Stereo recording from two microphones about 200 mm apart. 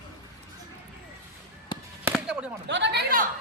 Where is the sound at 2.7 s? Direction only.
60° right (ahead or behind).